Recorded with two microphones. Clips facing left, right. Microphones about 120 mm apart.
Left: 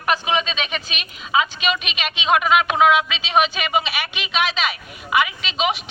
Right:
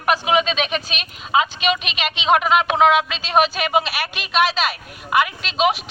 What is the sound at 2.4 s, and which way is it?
Speech, 5° left (ahead or behind).